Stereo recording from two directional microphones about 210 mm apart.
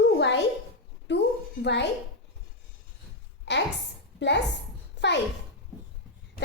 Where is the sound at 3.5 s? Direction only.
55° left (ahead or behind).